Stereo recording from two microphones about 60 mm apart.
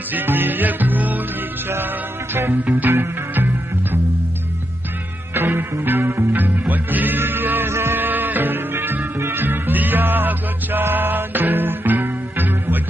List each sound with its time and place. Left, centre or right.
0.1 s music: right
2.3 s music: right
5.3 s music: right